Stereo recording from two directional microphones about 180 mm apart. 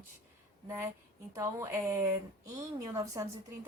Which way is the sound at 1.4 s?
15° right (ahead or behind).